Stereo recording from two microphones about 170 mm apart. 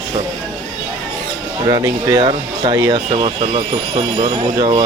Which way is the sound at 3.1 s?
35° right (ahead or behind).